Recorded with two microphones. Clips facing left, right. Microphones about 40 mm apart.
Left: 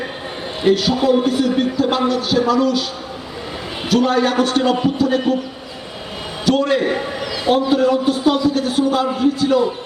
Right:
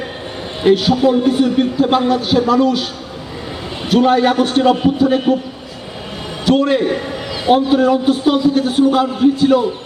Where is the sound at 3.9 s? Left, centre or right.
Right.